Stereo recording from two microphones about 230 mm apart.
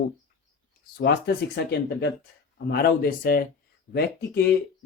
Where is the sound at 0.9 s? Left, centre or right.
Left.